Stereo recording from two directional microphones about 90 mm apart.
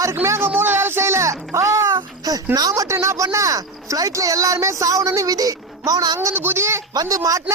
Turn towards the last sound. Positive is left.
turn(degrees=-40)  # may be behind; listen again after turning